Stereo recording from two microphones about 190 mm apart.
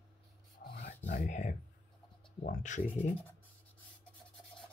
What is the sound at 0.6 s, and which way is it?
Filing, 55° left (ahead or behind).